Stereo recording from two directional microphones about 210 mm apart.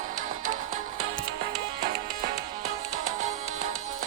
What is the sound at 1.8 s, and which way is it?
Music, 45° right (ahead or behind).